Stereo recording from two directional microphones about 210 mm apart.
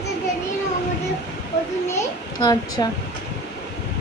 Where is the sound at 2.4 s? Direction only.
20° left (ahead or behind).